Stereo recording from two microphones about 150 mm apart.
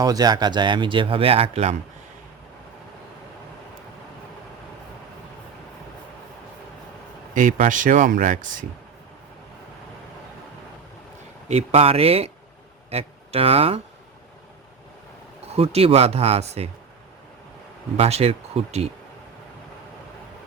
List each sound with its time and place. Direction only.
0.0 s speech: 25° right (ahead or behind); by 1.7 s 40° right (ahead or behind)
7.3 s speech: 60° right (ahead or behind)
11.4 s speech: 40° right (ahead or behind)
15.5 s speech: 40° right (ahead or behind)
17.9 s speech: 45° right (ahead or behind)